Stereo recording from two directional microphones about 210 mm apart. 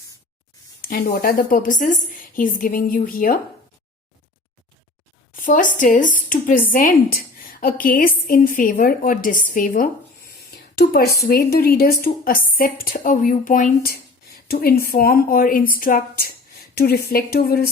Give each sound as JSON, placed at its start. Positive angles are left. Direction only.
{"t": 0.8, "sound": "speech", "side_deg": 40}
{"t": 5.4, "sound": "speech", "side_deg": 40}